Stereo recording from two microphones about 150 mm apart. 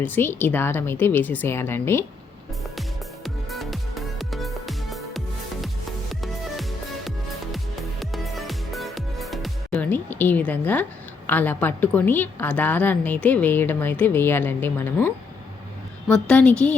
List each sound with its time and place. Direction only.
0.0 s a woman's voice: 15° left (ahead or behind)
3.2 s music: centre (ahead or behind)
9.8 s a woman's voice: 10° left (ahead or behind)